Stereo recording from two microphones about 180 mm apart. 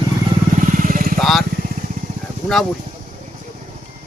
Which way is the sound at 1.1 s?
Centre (ahead or behind).